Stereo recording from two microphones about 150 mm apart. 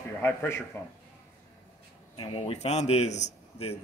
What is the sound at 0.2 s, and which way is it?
Speech, 15° left (ahead or behind).